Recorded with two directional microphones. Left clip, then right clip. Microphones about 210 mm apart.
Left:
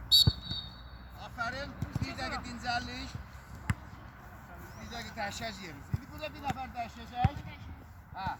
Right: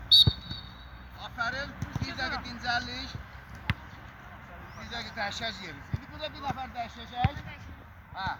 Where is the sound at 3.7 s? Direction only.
30° right (ahead or behind).